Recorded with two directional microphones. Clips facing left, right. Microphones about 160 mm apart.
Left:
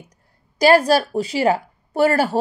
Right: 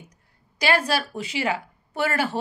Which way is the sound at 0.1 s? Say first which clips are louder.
Left 2 dB; 40° left (ahead or behind).